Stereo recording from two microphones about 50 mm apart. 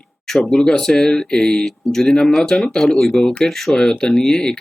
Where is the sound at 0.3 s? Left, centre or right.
Centre.